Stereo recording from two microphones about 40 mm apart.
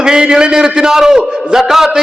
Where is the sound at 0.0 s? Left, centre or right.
Centre.